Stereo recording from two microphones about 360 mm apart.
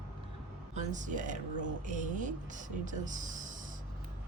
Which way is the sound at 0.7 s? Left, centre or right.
Centre.